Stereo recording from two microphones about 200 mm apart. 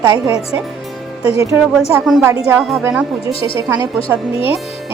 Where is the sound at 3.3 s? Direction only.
30° left (ahead or behind).